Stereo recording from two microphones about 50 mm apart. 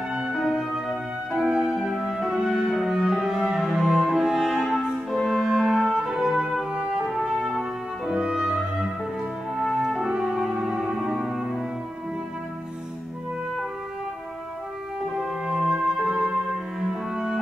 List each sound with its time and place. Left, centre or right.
0.3 s music: centre
1.5 s music: centre
2.1 s music: centre
6.7 s brass instrument: right
7.1 s brass instrument: centre
8.1 s music: centre
9.6 s french horn: centre
10.0 s music: centre
15.1 s music: centre